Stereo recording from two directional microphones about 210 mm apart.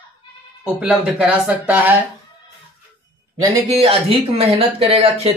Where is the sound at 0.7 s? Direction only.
5° right (ahead or behind).